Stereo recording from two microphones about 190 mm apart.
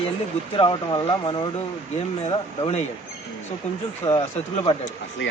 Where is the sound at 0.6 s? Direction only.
25° left (ahead or behind).